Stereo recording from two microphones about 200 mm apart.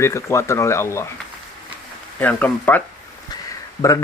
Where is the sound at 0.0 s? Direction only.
15° left (ahead or behind).